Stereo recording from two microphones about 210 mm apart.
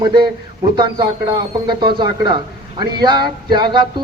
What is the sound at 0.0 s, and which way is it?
A man's voice, 20° right (ahead or behind).